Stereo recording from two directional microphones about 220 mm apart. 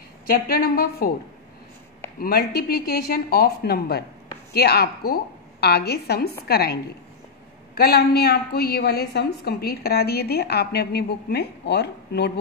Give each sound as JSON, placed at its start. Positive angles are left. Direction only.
{"t": 0.3, "sound": "a woman's voice", "side_deg": 45}
{"t": 2.1, "sound": "a woman's voice", "side_deg": 45}